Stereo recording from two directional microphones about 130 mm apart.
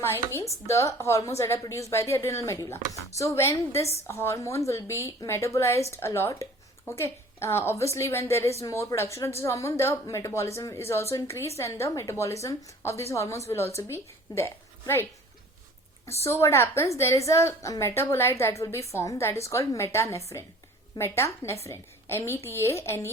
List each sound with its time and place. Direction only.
0.0 s a woman's voice: 20° left (ahead or behind)
16.2 s a woman's voice: 20° left (ahead or behind)